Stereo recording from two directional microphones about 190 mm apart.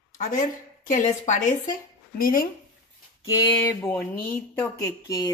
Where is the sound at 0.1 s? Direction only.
40° left (ahead or behind).